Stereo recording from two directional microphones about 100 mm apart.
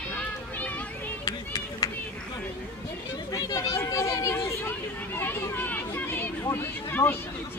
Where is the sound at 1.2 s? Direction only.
40° left (ahead or behind).